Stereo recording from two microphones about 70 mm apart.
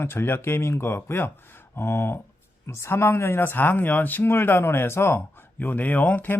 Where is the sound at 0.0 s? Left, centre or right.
Left.